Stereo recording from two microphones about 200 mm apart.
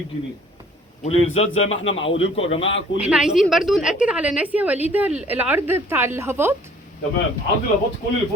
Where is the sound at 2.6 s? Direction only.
70° left (ahead or behind).